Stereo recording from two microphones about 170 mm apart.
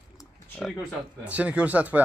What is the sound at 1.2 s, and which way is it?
Speech, 10° right (ahead or behind).